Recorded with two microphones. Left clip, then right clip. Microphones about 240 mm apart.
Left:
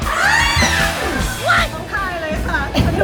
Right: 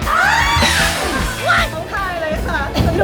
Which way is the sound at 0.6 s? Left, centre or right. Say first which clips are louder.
Right 1 dB; centre.